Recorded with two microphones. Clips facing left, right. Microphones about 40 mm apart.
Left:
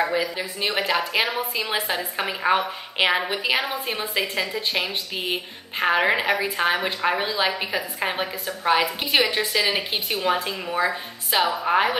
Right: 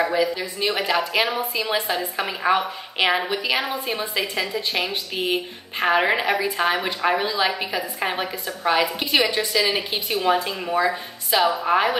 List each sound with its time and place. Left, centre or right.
0.3 s a woman's voice: centre
8.7 s a woman's voice: left